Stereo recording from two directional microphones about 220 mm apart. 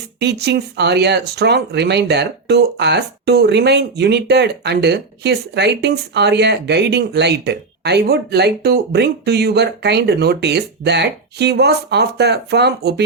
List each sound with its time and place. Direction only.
0.2 s speech: 50° right (ahead or behind)